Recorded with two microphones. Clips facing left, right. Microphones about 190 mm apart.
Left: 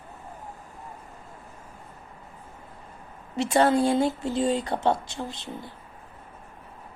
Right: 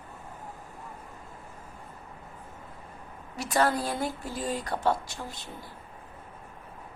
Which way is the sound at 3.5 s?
25° left (ahead or behind).